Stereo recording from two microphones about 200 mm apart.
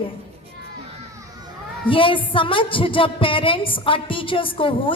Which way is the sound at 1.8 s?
25° left (ahead or behind).